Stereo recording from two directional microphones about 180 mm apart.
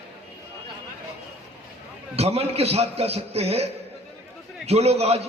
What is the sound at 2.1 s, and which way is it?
A man's voice, 35° right (ahead or behind).